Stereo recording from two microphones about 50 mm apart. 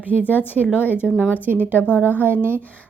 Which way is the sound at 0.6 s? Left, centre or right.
Centre.